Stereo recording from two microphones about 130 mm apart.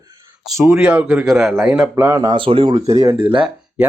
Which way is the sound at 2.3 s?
45° right (ahead or behind).